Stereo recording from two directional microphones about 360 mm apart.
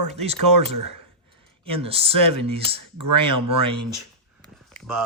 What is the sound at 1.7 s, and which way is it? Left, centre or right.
Speech, centre.